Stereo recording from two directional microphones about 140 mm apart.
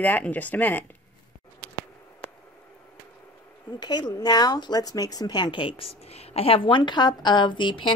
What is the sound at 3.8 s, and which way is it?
A woman's voice, 30° left (ahead or behind).